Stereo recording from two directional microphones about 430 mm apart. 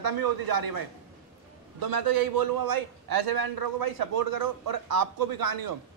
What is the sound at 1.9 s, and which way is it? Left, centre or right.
A man's voice, right.